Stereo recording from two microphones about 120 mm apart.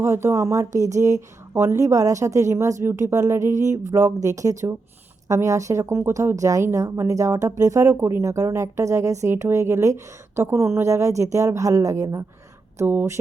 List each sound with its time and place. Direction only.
0.0 s speech: 20° right (ahead or behind)